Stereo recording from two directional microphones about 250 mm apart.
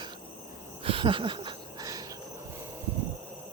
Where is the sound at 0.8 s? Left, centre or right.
Right.